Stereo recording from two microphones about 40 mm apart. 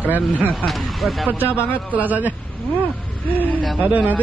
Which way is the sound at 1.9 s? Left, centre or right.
Right.